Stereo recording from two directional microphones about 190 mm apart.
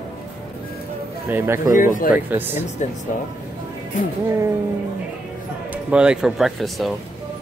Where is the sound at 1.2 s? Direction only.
10° right (ahead or behind).